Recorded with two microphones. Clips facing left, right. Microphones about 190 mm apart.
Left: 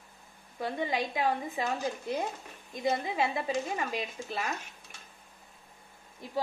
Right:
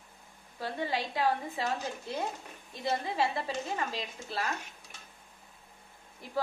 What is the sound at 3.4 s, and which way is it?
Speech, 15° left (ahead or behind).